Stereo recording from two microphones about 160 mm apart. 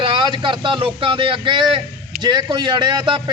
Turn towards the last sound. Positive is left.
turn(degrees=-30)  # may be behind; listen again after turning